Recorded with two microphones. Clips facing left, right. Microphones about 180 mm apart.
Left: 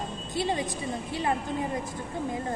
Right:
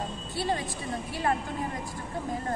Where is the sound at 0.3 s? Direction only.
20° left (ahead or behind).